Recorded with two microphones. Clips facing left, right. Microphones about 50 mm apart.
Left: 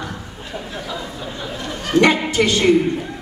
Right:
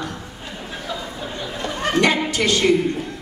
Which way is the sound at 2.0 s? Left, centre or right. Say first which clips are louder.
Left 4 dB; left.